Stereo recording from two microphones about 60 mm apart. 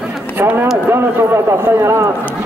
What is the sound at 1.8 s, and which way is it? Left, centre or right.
Speech, right.